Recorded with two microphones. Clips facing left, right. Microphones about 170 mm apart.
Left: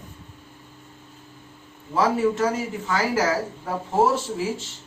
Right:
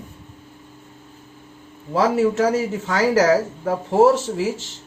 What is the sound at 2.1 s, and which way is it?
Speech, 80° right.